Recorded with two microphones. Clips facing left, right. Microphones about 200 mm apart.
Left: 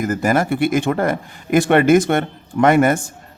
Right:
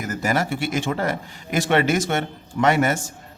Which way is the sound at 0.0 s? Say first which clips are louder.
Left 6 dB; 50° left (ahead or behind).